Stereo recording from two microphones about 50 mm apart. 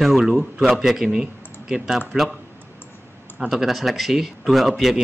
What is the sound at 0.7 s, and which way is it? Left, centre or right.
Speech, centre.